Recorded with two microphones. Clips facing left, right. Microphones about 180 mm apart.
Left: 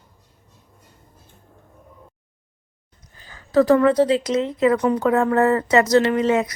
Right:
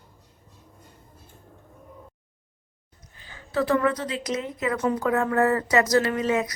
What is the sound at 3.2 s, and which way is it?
A woman's voice, 40° left (ahead or behind).